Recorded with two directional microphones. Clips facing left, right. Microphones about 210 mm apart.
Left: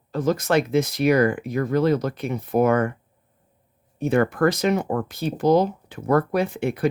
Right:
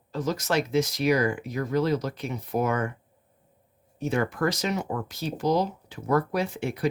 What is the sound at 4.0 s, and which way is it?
Speech, 55° left (ahead or behind).